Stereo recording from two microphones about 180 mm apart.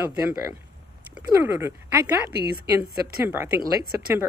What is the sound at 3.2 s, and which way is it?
A woman's voice, 10° right (ahead or behind).